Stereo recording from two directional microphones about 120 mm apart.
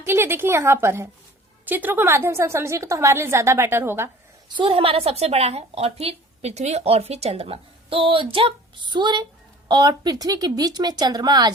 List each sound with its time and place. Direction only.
0.0 s a woman's voice: 20° right (ahead or behind)
4.4 s a woman's voice: 45° right (ahead or behind)